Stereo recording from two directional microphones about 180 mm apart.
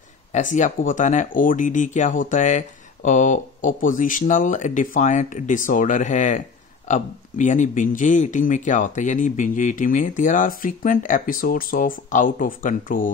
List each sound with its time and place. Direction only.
0.3 s speech: 45° left (ahead or behind)